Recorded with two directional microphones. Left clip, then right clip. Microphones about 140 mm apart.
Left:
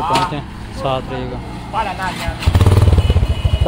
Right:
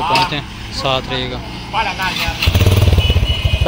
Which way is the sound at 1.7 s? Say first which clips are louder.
Right 2 dB; 35° left (ahead or behind).